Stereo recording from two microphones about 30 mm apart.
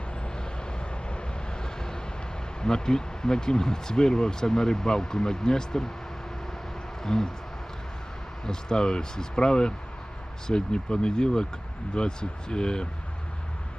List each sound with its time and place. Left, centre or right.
0.2 s vehicle: left
2.6 s speech: left
7.0 s speech: centre
8.4 s speech: left